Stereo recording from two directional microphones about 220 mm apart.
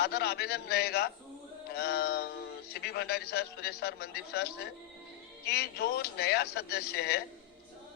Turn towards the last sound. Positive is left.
turn(degrees=45)  # may be behind; listen again after turning